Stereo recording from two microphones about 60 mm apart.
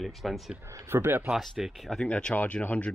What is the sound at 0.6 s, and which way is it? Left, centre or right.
Speech, right.